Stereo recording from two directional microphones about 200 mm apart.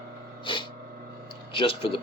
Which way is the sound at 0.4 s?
25° left (ahead or behind).